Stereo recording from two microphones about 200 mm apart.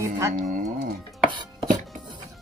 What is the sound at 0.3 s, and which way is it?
Speech, 40° right (ahead or behind).